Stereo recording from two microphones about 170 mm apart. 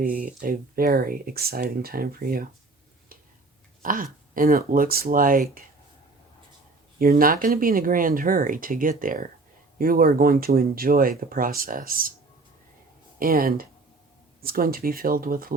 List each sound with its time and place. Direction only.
0.0 s speech: 55° right (ahead or behind)
3.8 s speech: 55° right (ahead or behind)
7.0 s speech: 55° right (ahead or behind)
13.1 s speech: 60° right (ahead or behind)